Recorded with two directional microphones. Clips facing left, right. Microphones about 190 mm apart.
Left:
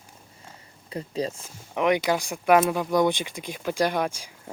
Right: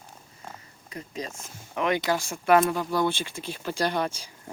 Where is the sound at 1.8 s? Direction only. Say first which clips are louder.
Left 3 dB; 15° left (ahead or behind).